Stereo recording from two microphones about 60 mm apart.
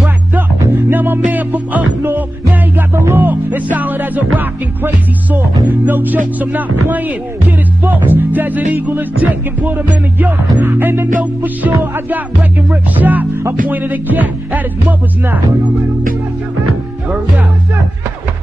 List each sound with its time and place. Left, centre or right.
0.6 s music: right
0.9 s music: right
2.9 s music: right